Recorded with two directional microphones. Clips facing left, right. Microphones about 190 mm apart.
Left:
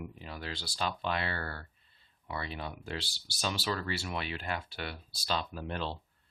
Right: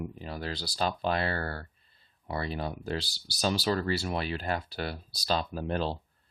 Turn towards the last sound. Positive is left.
turn(degrees=-40)  # may be behind; listen again after turning